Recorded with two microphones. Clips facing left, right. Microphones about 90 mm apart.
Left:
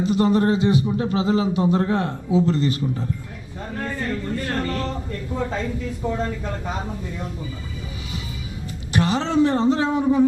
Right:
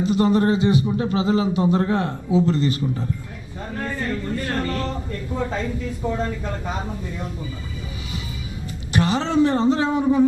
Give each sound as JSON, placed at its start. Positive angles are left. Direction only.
{"t": 0.0, "sound": "speech", "side_deg": -10}
{"t": 3.6, "sound": "a sound", "side_deg": -15}
{"t": 5.4, "sound": "speech", "side_deg": -15}
{"t": 8.9, "sound": "speech", "side_deg": -10}